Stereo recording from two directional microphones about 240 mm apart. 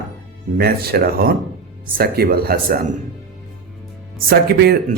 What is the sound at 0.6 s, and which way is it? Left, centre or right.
A man's voice, right.